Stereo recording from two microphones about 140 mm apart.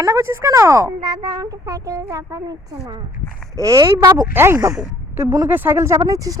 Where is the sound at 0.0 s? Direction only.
20° right (ahead or behind).